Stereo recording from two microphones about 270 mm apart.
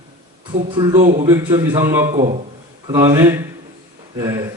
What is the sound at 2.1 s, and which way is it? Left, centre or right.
Speech, right.